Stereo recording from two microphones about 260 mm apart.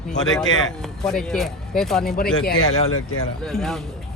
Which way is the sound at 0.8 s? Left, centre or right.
Centre.